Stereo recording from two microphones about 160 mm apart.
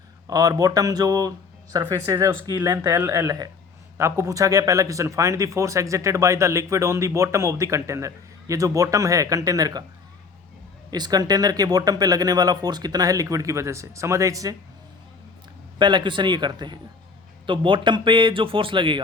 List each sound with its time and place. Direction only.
0.3 s speech: 25° right (ahead or behind)
10.9 s speech: 25° right (ahead or behind)
15.8 s a man's voice: 30° right (ahead or behind)